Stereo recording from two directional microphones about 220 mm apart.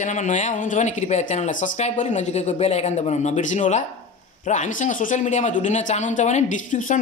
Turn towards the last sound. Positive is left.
turn(degrees=35)  # may be behind; listen again after turning